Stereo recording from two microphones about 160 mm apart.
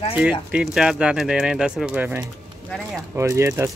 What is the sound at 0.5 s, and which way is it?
Speech, 5° right (ahead or behind).